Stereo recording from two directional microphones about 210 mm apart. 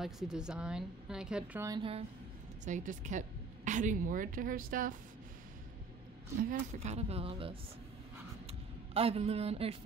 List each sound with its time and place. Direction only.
0.0 s a woman's voice: centre (ahead or behind)
1.8 s speech: 25° right (ahead or behind); by 4.9 s 40° right (ahead or behind)
6.7 s speech: 30° right (ahead or behind)
8.9 s speech: 30° right (ahead or behind)